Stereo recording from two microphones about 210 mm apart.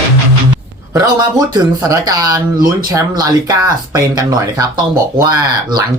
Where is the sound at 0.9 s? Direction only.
15° right (ahead or behind).